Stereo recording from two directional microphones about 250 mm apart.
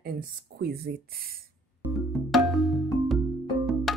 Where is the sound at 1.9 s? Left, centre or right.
Centre.